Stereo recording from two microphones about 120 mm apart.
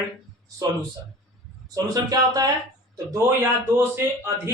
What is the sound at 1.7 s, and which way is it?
Speech, 30° right (ahead or behind).